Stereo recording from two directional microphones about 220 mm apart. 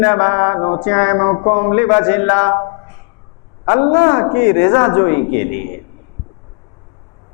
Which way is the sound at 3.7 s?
20° left (ahead or behind).